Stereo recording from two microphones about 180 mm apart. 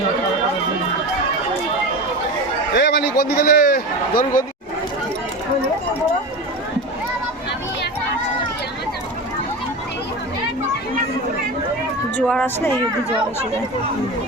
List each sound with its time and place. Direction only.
2.7 s a man's voice: 65° left (ahead or behind); by 4.4 s 50° left (ahead or behind)
12.1 s a woman's voice: 5° left (ahead or behind)